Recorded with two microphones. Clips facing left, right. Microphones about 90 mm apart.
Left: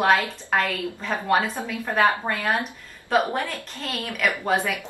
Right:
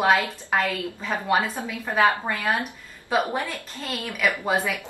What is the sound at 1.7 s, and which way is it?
Speech, 15° right (ahead or behind).